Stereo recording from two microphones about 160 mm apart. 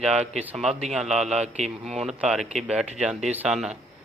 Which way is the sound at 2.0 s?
5° right (ahead or behind).